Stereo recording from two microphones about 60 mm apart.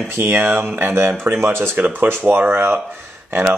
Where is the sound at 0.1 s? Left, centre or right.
Right.